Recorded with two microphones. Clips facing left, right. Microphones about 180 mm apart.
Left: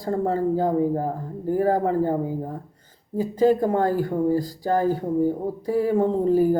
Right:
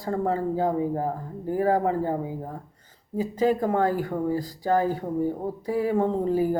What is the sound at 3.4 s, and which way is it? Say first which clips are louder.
Speech: left 3 dB; 35° left (ahead or behind).